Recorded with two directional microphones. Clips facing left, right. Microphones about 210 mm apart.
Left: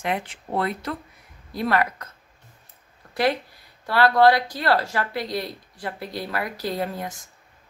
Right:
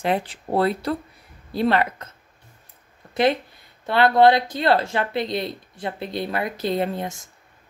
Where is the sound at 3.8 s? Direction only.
25° right (ahead or behind).